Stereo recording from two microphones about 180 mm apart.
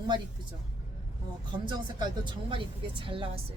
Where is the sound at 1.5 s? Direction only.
25° right (ahead or behind).